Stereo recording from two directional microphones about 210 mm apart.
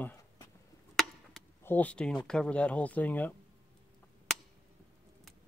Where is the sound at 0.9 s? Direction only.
5° left (ahead or behind).